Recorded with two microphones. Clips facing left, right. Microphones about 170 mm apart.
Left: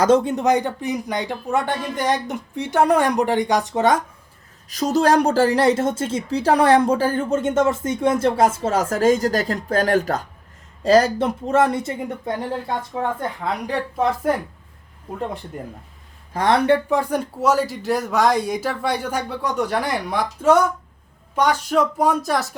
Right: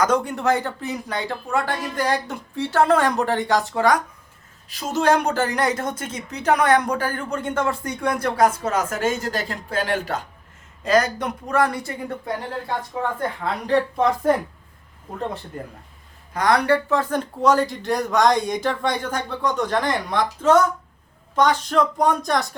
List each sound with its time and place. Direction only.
0.0 s speech: 25° left (ahead or behind)
4.7 s a woman's voice: 40° left (ahead or behind)
10.8 s a woman's voice: 30° left (ahead or behind)
13.7 s speech: 5° left (ahead or behind)
16.3 s a woman's voice: 30° left (ahead or behind)
16.9 s speech: 10° left (ahead or behind)